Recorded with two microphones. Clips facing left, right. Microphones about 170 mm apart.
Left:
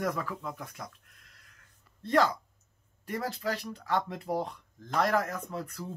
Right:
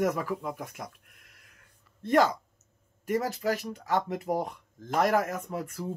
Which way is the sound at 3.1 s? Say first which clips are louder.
Right 5 dB; 10° right (ahead or behind).